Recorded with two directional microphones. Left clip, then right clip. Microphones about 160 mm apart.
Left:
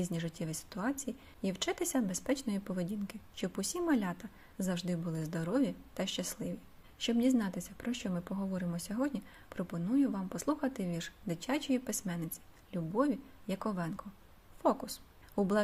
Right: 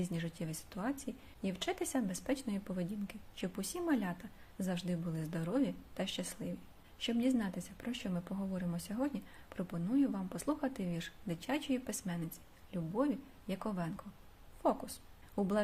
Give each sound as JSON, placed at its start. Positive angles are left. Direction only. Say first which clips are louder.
{"t": 0.0, "sound": "a woman's voice", "louder": "left 3 dB", "side_deg": 30}